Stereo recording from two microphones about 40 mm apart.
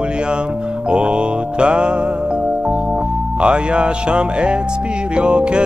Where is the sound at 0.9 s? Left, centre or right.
Right.